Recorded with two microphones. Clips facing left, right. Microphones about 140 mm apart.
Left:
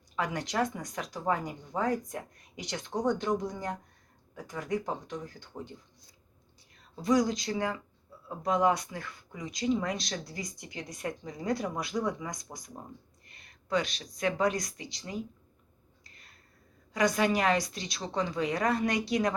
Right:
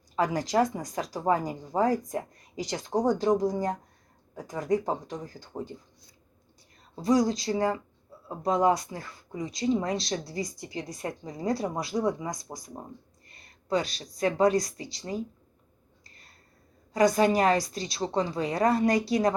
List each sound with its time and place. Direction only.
0.2 s speech: 35° right (ahead or behind)
6.9 s speech: 35° right (ahead or behind)
16.0 s a sound: 35° right (ahead or behind)
16.9 s speech: 35° right (ahead or behind)